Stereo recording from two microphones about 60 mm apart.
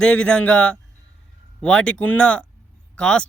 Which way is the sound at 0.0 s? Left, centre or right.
Centre.